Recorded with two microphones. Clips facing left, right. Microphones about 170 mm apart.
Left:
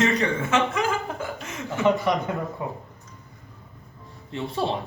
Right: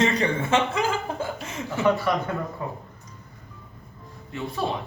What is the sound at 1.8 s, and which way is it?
Speech, 20° left (ahead or behind).